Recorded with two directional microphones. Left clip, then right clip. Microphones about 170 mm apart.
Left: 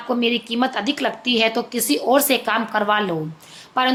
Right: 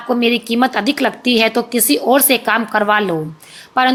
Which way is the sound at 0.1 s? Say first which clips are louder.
Right 5 dB; 25° right (ahead or behind).